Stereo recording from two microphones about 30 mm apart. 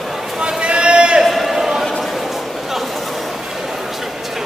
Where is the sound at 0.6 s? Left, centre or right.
Right.